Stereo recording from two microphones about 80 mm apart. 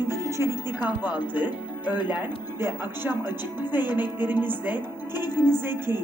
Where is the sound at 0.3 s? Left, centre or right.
Right.